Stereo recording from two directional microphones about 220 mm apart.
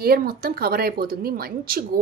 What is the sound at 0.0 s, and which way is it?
A woman's voice, 45° right (ahead or behind).